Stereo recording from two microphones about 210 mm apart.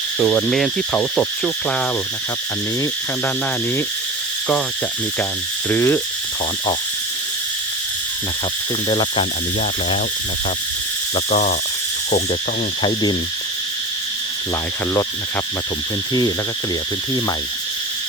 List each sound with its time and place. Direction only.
0.2 s insect: 5° left (ahead or behind)
5.6 s a sound: 10° left (ahead or behind)
8.9 s cricket: 25° left (ahead or behind)
11.3 s speech: 35° left (ahead or behind)
12.8 s cricket: 20° left (ahead or behind)